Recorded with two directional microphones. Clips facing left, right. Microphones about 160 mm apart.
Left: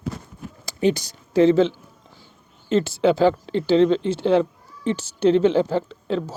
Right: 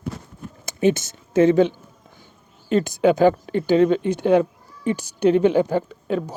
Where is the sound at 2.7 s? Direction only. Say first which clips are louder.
Right 1 dB; 15° right (ahead or behind).